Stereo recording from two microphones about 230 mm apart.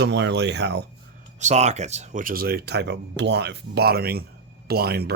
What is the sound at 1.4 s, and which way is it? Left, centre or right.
Speech, right.